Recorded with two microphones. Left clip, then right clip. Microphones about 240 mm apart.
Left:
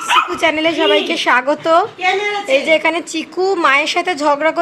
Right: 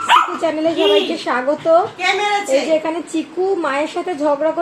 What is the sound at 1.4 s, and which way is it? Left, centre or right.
Speech, left.